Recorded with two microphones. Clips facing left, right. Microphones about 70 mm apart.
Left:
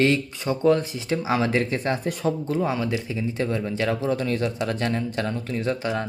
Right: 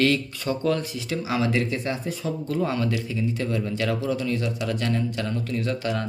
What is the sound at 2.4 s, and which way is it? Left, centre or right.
A man's voice, left.